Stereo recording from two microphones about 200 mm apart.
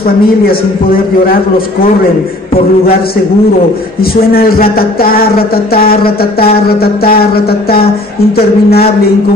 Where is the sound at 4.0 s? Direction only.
50° left (ahead or behind).